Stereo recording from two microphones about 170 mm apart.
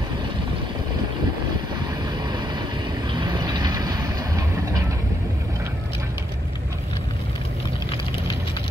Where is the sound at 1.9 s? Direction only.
25° right (ahead or behind).